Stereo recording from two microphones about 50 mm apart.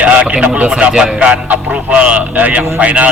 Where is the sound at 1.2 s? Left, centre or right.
Right.